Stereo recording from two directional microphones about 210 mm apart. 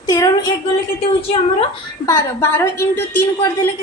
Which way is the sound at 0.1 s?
15° left (ahead or behind).